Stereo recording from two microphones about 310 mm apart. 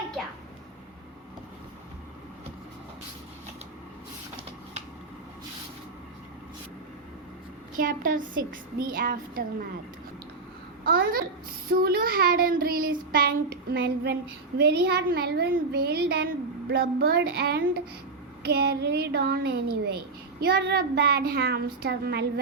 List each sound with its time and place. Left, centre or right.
7.8 s child singing: right
10.8 s child singing: right
14.6 s a woman's voice: right